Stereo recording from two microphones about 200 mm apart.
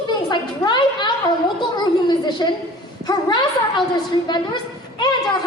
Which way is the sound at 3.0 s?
20° left (ahead or behind).